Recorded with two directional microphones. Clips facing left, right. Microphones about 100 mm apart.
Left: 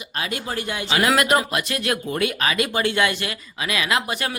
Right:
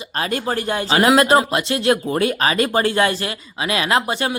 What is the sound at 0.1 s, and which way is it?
Speech, 40° right (ahead or behind).